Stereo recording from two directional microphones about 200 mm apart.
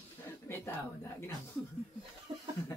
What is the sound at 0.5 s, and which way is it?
Speech, 10° left (ahead or behind).